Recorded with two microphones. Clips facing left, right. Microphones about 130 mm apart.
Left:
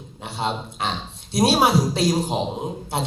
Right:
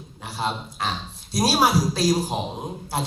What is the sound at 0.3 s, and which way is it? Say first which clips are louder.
A man's voice: left 1 dB; 25° left (ahead or behind).